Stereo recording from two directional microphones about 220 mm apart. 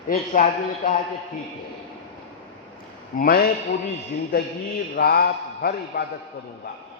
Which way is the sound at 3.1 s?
40° left (ahead or behind).